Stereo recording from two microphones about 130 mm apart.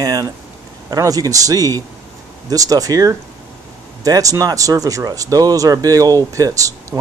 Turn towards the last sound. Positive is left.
turn(degrees=-25)  # may be behind; listen again after turning